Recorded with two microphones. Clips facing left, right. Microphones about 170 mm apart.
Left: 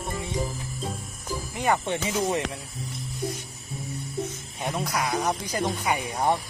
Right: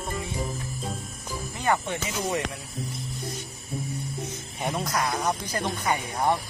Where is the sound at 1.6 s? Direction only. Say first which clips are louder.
Left 1 dB; 20° left (ahead or behind).